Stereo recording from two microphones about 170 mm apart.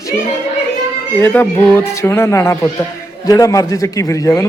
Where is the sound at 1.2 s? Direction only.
10° left (ahead or behind).